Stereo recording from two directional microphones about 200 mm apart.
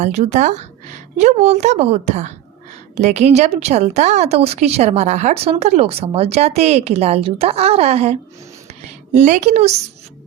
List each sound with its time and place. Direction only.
0.0 s a woman's voice: 35° right (ahead or behind)